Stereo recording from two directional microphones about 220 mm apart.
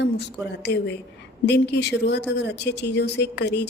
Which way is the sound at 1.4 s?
50° left (ahead or behind).